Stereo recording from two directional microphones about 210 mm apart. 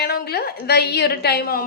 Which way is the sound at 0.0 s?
50° left (ahead or behind).